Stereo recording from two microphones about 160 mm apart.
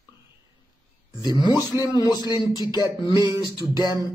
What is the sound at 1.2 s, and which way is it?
Speech, 25° left (ahead or behind).